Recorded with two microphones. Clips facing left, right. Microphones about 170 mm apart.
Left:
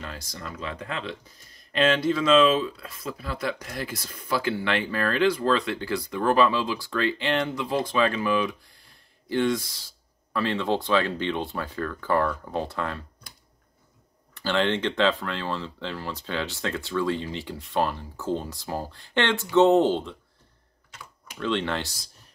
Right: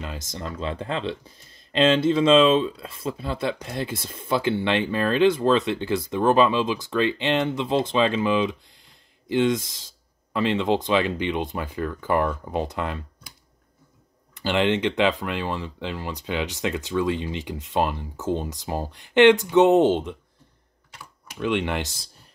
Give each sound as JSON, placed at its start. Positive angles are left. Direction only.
{"t": 0.0, "sound": "speech", "side_deg": -20}
{"t": 14.3, "sound": "speech", "side_deg": -15}
{"t": 21.4, "sound": "speech", "side_deg": -15}